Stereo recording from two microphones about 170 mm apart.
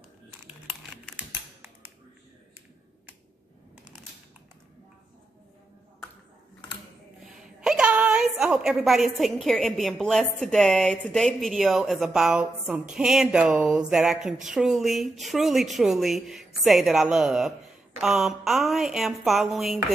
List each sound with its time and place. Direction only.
0.5 s typing: 10° right (ahead or behind)
7.6 s a woman's voice: 5° right (ahead or behind)